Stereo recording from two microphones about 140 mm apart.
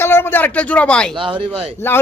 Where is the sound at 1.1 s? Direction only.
35° right (ahead or behind).